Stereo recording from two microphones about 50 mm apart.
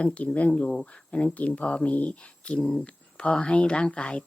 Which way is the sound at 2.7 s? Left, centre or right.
Centre.